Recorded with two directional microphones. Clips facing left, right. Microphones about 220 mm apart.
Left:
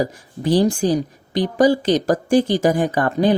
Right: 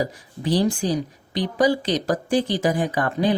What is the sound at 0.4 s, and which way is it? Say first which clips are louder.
Speech: left 4 dB; 45° left (ahead or behind).